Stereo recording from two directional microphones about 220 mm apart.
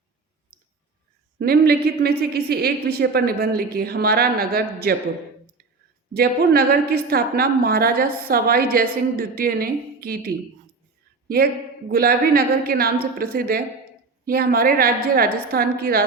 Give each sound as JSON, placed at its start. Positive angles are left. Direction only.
{"t": 0.5, "sound": "clicking", "side_deg": -40}
{"t": 1.4, "sound": "a woman's voice", "side_deg": -45}
{"t": 6.1, "sound": "a woman's voice", "side_deg": -45}
{"t": 11.9, "sound": "a woman's voice", "side_deg": -45}